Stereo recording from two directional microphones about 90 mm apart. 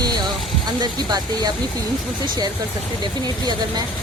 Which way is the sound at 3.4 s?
50° right (ahead or behind).